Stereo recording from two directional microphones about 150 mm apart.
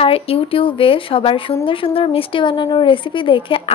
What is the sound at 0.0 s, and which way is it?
A woman's voice, 40° left (ahead or behind).